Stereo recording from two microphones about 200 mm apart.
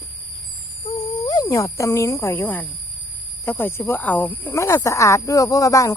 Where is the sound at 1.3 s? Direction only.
20° left (ahead or behind).